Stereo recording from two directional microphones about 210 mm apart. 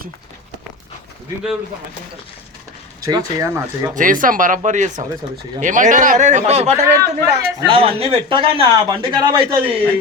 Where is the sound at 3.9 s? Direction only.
40° right (ahead or behind).